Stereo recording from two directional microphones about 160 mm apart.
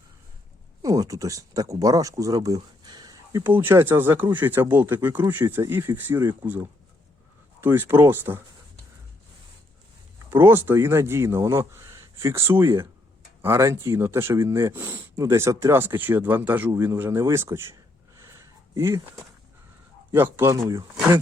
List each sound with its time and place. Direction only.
0.8 s speech: 20° right (ahead or behind)
3.4 s speech: 15° right (ahead or behind)
10.2 s speech: 15° right (ahead or behind)
18.2 s a sound: 20° right (ahead or behind)
20.1 s speech: 10° right (ahead or behind)